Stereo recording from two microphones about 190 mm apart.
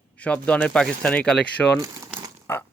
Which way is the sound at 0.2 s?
5° left (ahead or behind).